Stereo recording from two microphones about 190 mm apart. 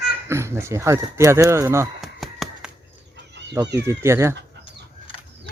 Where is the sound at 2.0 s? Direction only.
Centre (ahead or behind).